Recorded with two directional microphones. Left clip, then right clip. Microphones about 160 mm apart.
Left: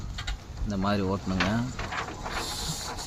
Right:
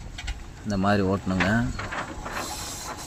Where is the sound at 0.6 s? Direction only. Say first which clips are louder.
Right 5 dB; 20° right (ahead or behind).